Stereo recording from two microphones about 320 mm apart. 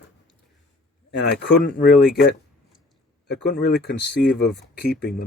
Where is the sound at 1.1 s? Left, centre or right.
Left.